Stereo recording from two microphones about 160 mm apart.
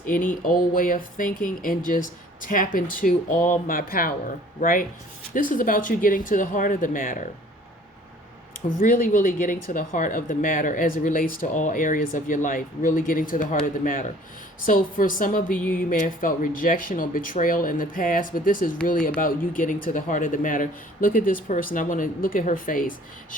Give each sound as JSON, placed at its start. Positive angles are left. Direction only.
{"t": 0.0, "sound": "speech", "side_deg": 60}
{"t": 8.8, "sound": "speech", "side_deg": 65}